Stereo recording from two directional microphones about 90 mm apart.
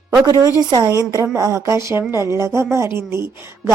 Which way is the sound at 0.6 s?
45° right (ahead or behind).